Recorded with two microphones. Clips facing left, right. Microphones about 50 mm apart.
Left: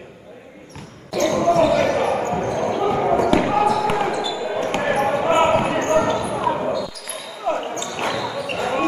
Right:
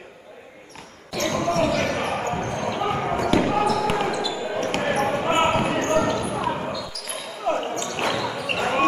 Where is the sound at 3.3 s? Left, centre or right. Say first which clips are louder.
Left 3 dB; left.